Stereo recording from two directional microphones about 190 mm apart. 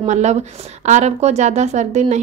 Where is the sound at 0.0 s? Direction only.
35° right (ahead or behind).